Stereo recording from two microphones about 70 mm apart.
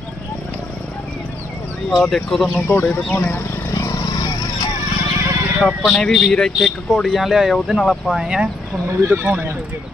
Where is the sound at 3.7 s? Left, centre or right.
Left.